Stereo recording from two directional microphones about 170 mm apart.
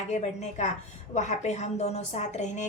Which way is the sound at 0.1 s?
40° left (ahead or behind).